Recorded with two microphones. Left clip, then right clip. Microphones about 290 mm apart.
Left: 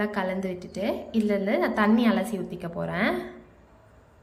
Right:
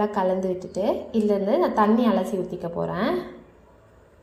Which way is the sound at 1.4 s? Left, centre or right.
Centre.